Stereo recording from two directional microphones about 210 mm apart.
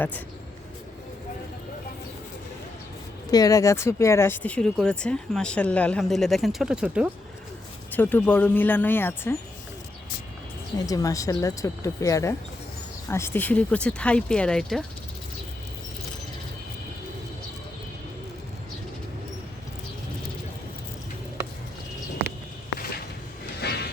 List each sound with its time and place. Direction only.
3.3 s speech: 15° left (ahead or behind); by 7.1 s 5° right (ahead or behind)
7.9 s speech: 10° left (ahead or behind)
10.8 s speech: 15° left (ahead or behind)
23.6 s music: 50° left (ahead or behind)